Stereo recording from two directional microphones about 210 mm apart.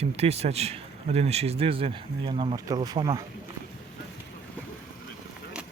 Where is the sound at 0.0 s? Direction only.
30° right (ahead or behind).